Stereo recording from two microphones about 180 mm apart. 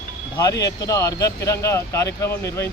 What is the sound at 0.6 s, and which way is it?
Speech, 20° left (ahead or behind).